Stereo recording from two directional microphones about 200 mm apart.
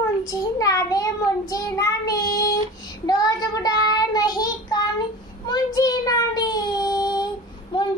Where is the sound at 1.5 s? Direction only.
15° left (ahead or behind).